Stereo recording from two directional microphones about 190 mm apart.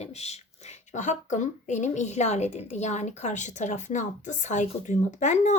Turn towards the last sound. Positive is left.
turn(degrees=40)  # may be behind; listen again after turning